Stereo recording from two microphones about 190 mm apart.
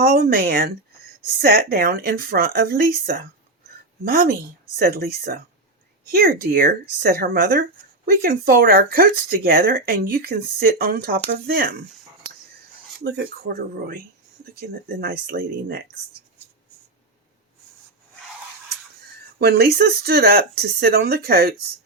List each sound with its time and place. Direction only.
0.0 s speech: 55° right (ahead or behind)
4.0 s speech: 50° right (ahead or behind)
13.1 s speech: 65° right (ahead or behind)
13.6 s speech: 50° right (ahead or behind)
19.4 s speech: 55° right (ahead or behind)